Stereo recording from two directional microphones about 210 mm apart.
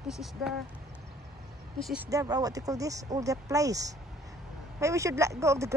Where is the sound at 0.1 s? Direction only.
Centre (ahead or behind).